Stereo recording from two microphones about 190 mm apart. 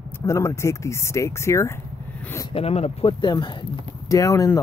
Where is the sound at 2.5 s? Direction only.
30° left (ahead or behind).